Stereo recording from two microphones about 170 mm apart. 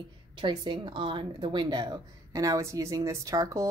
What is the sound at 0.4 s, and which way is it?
A woman's voice, 30° right (ahead or behind).